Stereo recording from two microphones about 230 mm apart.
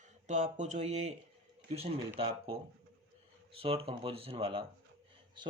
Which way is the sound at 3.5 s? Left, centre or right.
Right.